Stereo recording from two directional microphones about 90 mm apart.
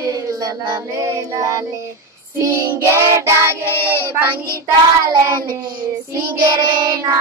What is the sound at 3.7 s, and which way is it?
Child singing, 25° left (ahead or behind).